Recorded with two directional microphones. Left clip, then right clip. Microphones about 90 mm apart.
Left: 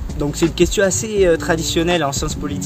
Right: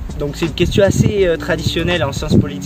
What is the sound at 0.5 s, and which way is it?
Speech, 45° left (ahead or behind).